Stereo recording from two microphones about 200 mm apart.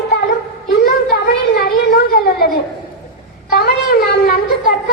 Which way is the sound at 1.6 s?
50° left (ahead or behind).